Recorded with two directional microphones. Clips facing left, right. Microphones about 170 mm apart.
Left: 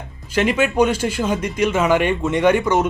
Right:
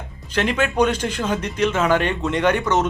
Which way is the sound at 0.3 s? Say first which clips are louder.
Left 3 dB; 10° left (ahead or behind).